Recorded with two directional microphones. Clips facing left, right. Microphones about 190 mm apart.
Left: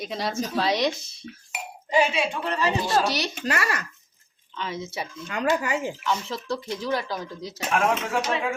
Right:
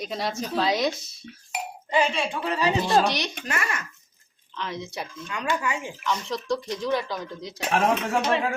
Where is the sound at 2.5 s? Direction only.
15° right (ahead or behind).